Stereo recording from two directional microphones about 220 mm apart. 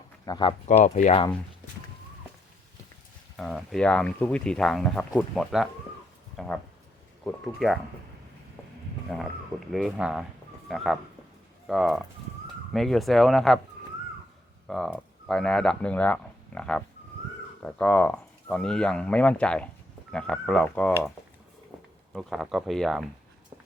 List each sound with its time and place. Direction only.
0.3 s speech: 20° left (ahead or behind)
0.9 s speech: 30° left (ahead or behind)
3.3 s speech: centre (ahead or behind)
9.1 s speech: centre (ahead or behind)
14.7 s speech: centre (ahead or behind)
22.1 s speech: centre (ahead or behind)